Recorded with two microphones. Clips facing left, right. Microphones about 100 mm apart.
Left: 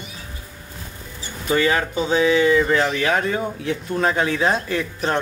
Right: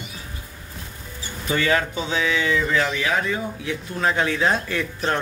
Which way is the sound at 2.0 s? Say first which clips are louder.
Left 6 dB; 40° left (ahead or behind).